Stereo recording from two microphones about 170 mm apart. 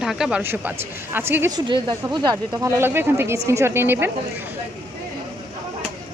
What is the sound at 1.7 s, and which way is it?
Speech, 25° right (ahead or behind).